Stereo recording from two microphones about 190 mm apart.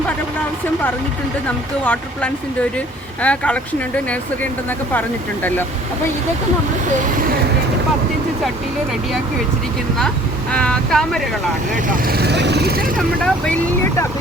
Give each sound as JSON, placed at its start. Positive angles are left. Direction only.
{"t": 1.8, "sound": "speech", "side_deg": 10}
{"t": 10.5, "sound": "speech", "side_deg": 5}
{"t": 11.9, "sound": "speech", "side_deg": -55}
{"t": 13.2, "sound": "speech", "side_deg": 5}